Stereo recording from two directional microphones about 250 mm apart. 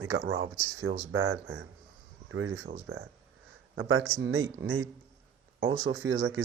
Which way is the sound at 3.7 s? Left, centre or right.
Right.